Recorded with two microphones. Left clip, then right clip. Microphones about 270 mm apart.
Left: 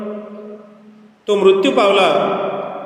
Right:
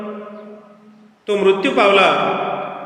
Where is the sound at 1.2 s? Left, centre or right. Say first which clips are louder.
Left 3 dB; left.